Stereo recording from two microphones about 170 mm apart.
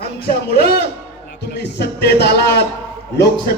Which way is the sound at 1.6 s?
80° left.